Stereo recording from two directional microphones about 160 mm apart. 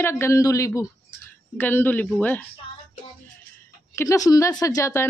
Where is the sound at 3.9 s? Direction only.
20° left (ahead or behind).